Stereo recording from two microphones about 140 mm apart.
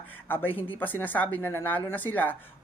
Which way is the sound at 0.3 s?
15° left (ahead or behind).